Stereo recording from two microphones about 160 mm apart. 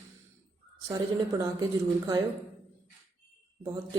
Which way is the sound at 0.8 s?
25° right (ahead or behind).